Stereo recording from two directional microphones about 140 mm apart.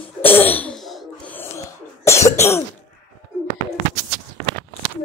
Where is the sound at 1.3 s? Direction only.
15° left (ahead or behind).